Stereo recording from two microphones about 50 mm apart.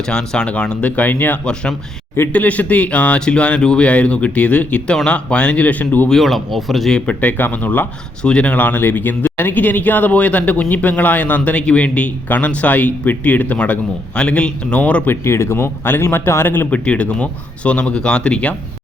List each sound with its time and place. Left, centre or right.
0.1 s speech: centre
0.8 s speech: left
6.1 s speech: centre
6.9 s speech: left
8.2 s speech: left
8.5 s speech: left
15.1 s speech: left
16.6 s speech: left